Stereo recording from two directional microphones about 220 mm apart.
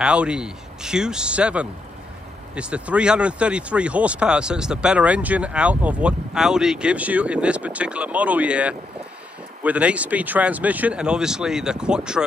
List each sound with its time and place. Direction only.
0.0 s speech: 5° right (ahead or behind)